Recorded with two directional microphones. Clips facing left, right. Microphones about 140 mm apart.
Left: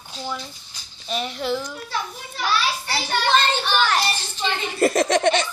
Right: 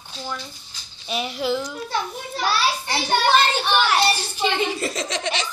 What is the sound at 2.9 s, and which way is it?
Speech, 20° right (ahead or behind).